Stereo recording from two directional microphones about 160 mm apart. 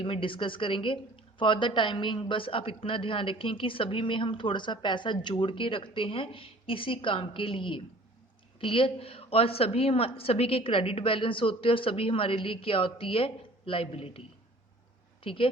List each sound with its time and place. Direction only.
0.0 s a woman's voice: 30° left (ahead or behind)
15.2 s speech: 35° left (ahead or behind)